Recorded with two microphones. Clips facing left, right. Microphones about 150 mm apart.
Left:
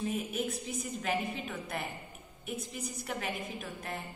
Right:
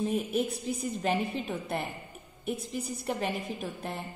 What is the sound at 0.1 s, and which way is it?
A woman's voice, 30° right (ahead or behind).